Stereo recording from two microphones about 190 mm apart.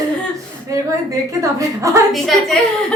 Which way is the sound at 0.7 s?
15° right (ahead or behind).